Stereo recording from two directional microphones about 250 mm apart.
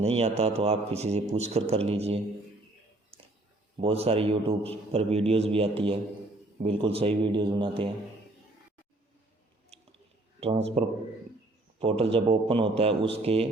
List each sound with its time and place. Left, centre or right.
0.0 s a man's voice: right
3.8 s a man's voice: right
10.4 s a man's voice: right
11.8 s a man's voice: right